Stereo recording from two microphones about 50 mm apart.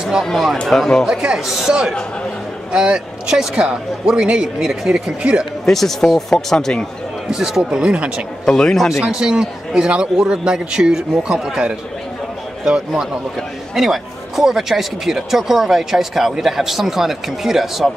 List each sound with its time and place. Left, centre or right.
0.2 s speech: centre
1.0 s speech: centre
5.7 s speech: centre
7.2 s speech: centre
8.5 s speech: centre
9.0 s speech: centre
12.6 s speech: centre